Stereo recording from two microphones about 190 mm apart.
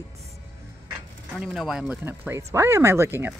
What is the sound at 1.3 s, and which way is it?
Speech, centre (ahead or behind).